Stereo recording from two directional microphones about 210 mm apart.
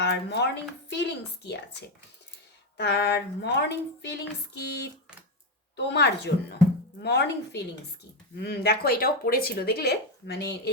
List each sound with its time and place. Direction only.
0.0 s a child's voice: 55° left (ahead or behind)
2.7 s speech: 55° left (ahead or behind)